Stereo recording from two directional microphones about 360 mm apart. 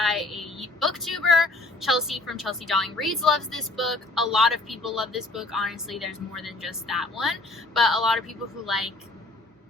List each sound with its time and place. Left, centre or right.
0.0 s a woman's voice: centre